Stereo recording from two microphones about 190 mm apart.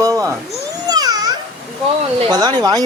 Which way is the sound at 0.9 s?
20° right (ahead or behind).